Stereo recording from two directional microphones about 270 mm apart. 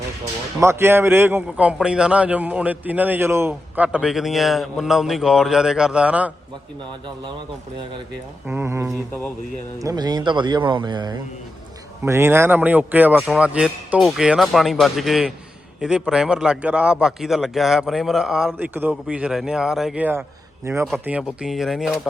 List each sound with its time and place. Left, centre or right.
0.6 s a man's voice: centre
8.4 s a man's voice: centre